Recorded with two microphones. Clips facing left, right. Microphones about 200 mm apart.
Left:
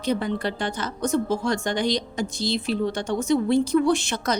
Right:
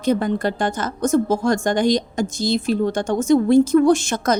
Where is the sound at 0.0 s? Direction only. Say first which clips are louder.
Right 5 dB; 45° right (ahead or behind).